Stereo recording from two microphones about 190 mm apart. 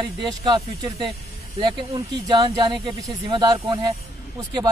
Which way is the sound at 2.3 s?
20° right (ahead or behind).